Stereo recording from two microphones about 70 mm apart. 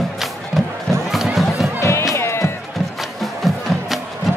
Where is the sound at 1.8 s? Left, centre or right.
Left.